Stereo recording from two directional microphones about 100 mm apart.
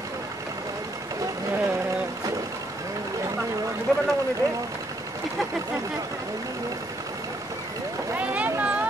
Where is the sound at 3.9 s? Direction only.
5° left (ahead or behind).